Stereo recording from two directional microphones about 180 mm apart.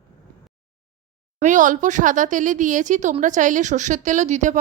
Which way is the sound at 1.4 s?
45° right (ahead or behind).